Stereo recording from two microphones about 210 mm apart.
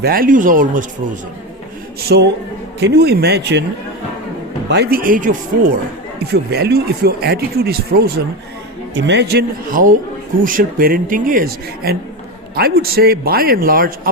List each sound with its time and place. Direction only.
0.0 s speech: 45° right (ahead or behind)
2.0 s speech: 50° right (ahead or behind)
4.7 s speech: 50° right (ahead or behind)